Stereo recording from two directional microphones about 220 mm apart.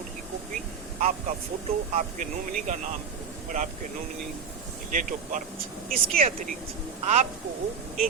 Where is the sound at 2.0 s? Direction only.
35° right (ahead or behind).